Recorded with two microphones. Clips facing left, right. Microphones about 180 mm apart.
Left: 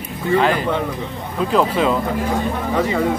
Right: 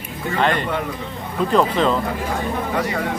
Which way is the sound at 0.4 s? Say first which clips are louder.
Even; 5° left (ahead or behind).